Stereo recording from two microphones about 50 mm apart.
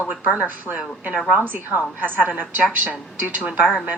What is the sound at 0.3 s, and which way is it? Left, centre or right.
Speech, right.